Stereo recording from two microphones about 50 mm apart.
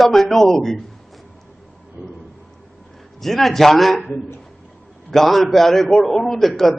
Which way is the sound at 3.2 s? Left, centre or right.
Centre.